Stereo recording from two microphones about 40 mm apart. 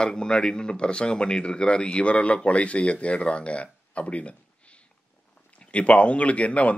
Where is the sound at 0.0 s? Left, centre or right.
Left.